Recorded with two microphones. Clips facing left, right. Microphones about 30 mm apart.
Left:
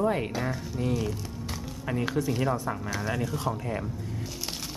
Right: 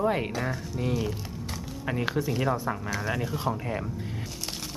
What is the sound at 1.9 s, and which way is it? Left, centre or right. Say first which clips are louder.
Speech: even; centre.